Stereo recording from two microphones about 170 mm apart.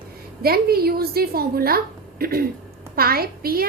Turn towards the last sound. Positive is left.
turn(degrees=-60)  # may be behind; listen again after turning